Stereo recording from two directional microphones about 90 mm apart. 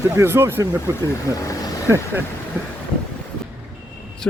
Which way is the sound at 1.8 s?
30° right (ahead or behind).